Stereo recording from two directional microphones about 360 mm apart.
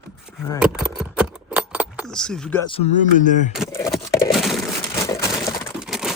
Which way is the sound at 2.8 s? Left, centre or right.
Left.